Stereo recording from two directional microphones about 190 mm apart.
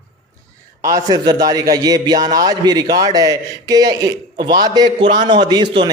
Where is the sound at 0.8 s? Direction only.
15° right (ahead or behind).